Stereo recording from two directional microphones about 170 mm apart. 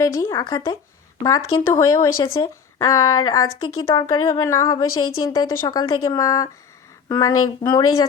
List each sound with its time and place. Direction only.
0.0 s speech: 20° left (ahead or behind)